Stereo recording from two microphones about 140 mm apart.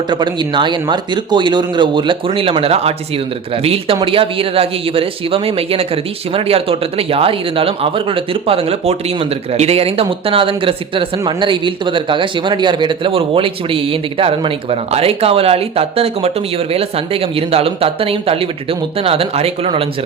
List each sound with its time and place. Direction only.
0.1 s speech: 30° right (ahead or behind)